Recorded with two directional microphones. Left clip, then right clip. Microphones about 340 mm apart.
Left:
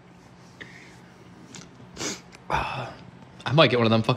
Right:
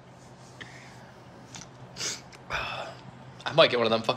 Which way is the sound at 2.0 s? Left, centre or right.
Centre.